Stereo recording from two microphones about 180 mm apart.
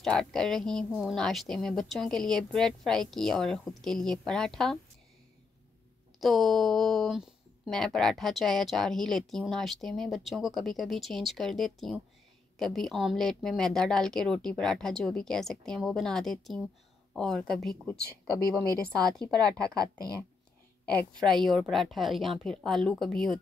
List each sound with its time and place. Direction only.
0.0 s speech: 5° left (ahead or behind)
6.1 s speech: centre (ahead or behind)
18.9 s speech: 5° left (ahead or behind)
19.7 s a woman's voice: 20° right (ahead or behind)
21.2 s speech: 5° left (ahead or behind)